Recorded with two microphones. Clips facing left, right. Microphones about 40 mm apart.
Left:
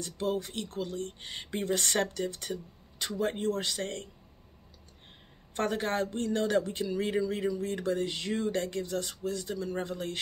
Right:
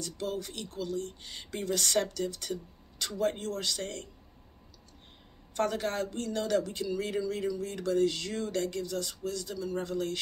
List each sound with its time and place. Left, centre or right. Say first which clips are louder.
0.0 s speech: left 3 dB; left
5.5 s speech: even; left